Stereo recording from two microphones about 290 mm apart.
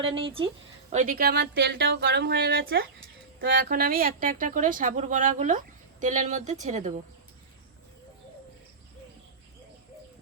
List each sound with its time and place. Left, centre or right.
0.1 s speech: centre